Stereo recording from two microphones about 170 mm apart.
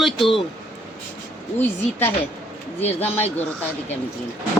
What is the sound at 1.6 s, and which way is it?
Speech, 10° left (ahead or behind).